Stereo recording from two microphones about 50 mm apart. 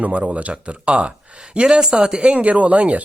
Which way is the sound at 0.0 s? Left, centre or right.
Right.